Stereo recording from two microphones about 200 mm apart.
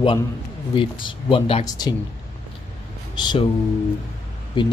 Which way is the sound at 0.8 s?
25° left (ahead or behind).